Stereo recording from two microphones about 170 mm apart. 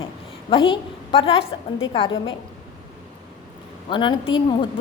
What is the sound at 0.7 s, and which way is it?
Speech, 30° left (ahead or behind).